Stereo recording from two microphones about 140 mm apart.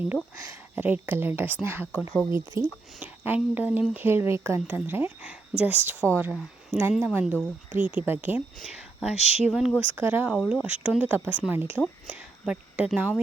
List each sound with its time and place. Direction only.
0.8 s speech: 15° right (ahead or behind)
8.6 s speech: 5° right (ahead or behind)
9.1 s speech: 50° left (ahead or behind)
9.5 s speech: 5° right (ahead or behind)
9.8 s speech: 15° right (ahead or behind)